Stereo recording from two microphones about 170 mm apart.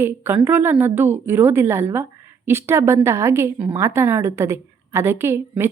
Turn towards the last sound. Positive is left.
turn(degrees=-15)  # may be behind; listen again after turning